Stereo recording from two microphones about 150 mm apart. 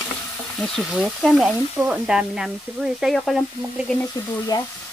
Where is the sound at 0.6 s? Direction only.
Centre (ahead or behind).